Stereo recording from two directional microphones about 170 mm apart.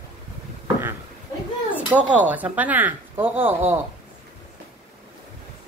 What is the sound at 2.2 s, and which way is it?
Speech, 10° right (ahead or behind).